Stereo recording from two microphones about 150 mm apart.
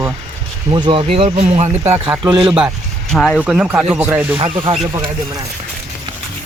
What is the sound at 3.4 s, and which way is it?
Speech, 10° right (ahead or behind).